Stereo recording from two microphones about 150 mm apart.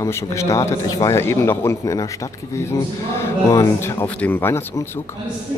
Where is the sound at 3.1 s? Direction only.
20° left (ahead or behind).